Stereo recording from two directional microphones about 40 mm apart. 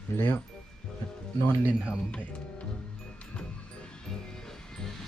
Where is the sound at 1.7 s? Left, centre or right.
Right.